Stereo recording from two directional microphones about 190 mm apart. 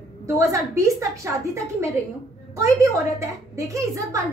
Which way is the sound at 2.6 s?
15° right (ahead or behind).